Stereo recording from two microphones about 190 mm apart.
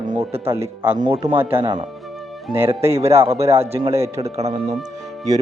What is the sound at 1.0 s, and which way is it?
Speech, 25° right (ahead or behind).